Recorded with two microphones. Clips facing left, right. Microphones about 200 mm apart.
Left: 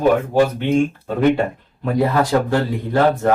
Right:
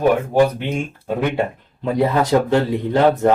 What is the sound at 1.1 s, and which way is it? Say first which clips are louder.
Speech: left 1 dB; 20° right (ahead or behind).